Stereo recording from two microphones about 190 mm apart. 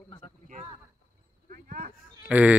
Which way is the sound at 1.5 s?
45° right (ahead or behind).